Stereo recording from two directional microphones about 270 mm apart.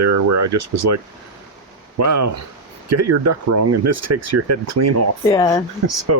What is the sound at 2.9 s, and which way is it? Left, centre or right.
Speech, right.